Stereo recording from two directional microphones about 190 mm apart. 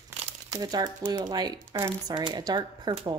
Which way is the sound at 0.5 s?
20° right (ahead or behind).